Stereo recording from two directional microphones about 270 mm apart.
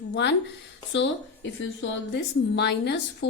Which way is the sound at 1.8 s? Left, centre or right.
Left.